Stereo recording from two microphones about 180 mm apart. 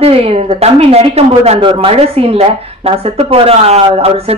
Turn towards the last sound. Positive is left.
turn(degrees=-35)  # may be behind; listen again after turning